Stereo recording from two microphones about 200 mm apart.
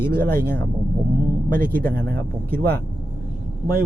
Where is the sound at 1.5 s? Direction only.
45° right (ahead or behind).